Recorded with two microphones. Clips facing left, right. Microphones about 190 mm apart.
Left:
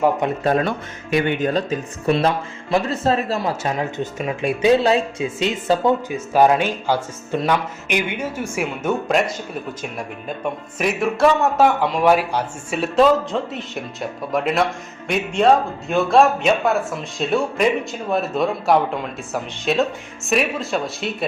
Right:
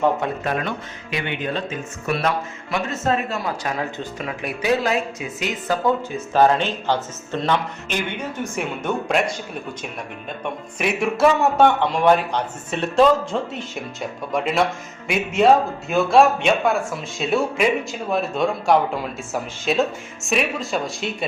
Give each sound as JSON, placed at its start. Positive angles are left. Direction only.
{"t": 0.4, "sound": "speech", "side_deg": 35}
{"t": 1.1, "sound": "speech", "side_deg": 45}
{"t": 6.1, "sound": "speech", "side_deg": 15}
{"t": 10.2, "sound": "speech", "side_deg": 5}